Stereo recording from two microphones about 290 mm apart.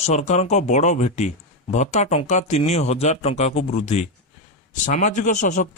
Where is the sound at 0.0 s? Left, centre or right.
Left.